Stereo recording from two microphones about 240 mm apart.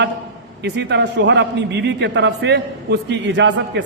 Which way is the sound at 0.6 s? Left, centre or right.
Right.